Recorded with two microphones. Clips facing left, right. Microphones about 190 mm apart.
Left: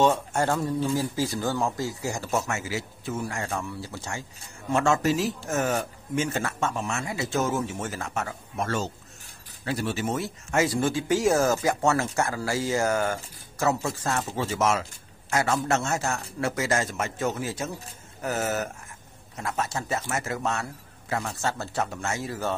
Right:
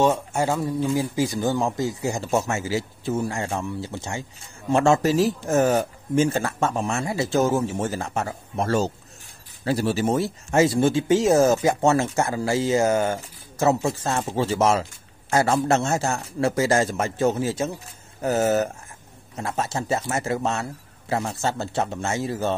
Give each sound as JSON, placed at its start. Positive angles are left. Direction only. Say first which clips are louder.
{"t": 0.0, "sound": "speech", "louder": "right 2 dB", "side_deg": -10}